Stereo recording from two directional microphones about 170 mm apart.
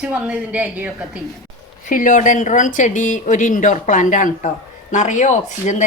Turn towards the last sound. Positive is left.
turn(degrees=45)  # may be behind; listen again after turning